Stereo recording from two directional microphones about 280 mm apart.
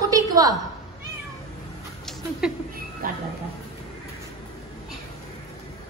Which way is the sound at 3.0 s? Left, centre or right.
Right.